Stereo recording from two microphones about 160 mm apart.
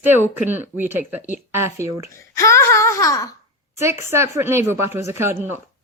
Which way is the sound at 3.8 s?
15° right (ahead or behind).